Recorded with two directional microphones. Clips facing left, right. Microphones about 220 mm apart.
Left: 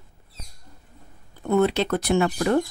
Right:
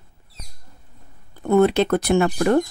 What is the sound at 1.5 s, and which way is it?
Speech, 50° right (ahead or behind).